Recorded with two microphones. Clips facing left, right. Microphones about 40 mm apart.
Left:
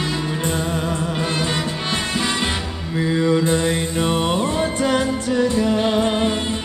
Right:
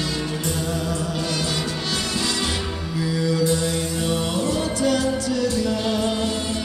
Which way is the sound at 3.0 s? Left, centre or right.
Left.